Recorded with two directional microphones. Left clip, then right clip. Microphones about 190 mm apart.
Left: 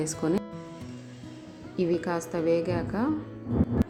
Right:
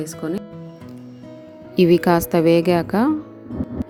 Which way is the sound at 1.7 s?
45° right (ahead or behind).